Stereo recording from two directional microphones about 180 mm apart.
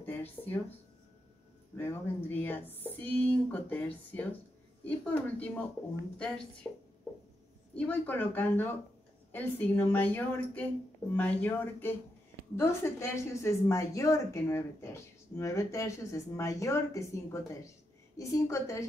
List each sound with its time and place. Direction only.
0.0 s a sound: 10° left (ahead or behind)
1.8 s a woman's voice: 10° left (ahead or behind)
7.7 s a woman's voice: 10° left (ahead or behind)